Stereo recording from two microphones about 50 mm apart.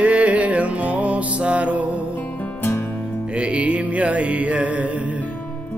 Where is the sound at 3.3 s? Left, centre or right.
Right.